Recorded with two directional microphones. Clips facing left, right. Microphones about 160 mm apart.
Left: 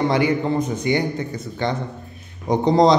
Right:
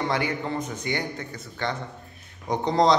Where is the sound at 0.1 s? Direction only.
20° left (ahead or behind).